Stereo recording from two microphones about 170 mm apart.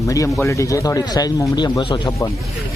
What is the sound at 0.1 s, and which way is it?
Speech, 15° left (ahead or behind).